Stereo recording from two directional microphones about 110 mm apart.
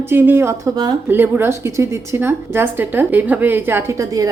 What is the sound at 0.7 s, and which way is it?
Speech, 40° right (ahead or behind).